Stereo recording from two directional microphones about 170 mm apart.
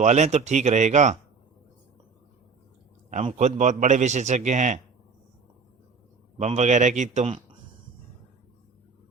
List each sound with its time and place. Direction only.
0.0 s a man's voice: 40° right (ahead or behind)
3.1 s a man's voice: 40° right (ahead or behind)
6.3 s a man's voice: 40° right (ahead or behind)